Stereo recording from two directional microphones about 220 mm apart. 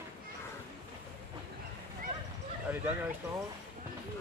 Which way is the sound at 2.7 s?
5° right (ahead or behind).